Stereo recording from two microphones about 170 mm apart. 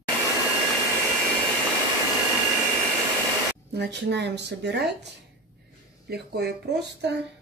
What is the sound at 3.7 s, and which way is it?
Speech, 90° right.